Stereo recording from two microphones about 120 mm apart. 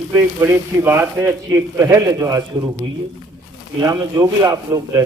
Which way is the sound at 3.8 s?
30° right (ahead or behind).